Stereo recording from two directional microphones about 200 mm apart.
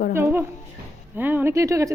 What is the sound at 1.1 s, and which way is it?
Speech, 10° right (ahead or behind).